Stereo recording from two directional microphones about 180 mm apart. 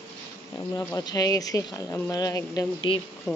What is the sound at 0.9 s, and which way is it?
Speech, 20° left (ahead or behind).